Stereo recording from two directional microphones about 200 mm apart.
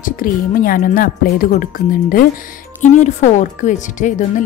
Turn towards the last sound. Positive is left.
turn(degrees=40)  # may be behind; listen again after turning